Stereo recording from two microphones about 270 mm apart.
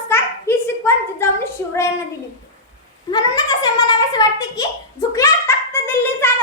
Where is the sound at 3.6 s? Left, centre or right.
Centre.